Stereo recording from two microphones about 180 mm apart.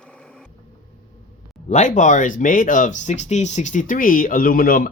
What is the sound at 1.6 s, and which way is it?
Speech, 40° left (ahead or behind).